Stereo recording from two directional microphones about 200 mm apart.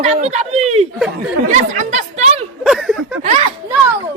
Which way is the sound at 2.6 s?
Centre (ahead or behind).